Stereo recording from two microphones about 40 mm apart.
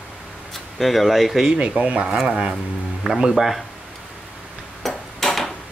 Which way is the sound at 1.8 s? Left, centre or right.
Right.